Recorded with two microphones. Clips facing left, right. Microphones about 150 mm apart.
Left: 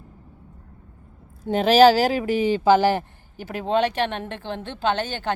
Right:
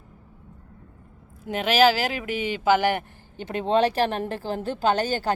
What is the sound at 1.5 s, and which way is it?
Speech, 35° left (ahead or behind).